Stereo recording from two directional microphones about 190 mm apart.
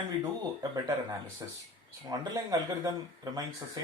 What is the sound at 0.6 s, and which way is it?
Speech, 20° right (ahead or behind).